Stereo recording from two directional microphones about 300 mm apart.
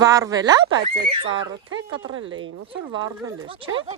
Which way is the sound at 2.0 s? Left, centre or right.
Right.